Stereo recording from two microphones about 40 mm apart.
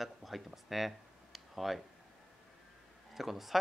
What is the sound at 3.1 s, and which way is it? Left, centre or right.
Speech, centre.